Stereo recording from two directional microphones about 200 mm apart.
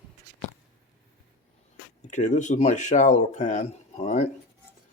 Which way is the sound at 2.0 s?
35° left (ahead or behind).